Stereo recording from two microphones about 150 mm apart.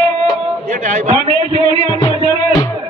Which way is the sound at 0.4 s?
55° right (ahead or behind).